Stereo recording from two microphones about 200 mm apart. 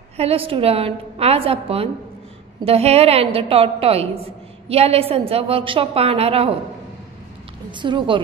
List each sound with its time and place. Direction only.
0.2 s a woman's voice: 30° right (ahead or behind)
7.7 s a woman's voice: 25° right (ahead or behind)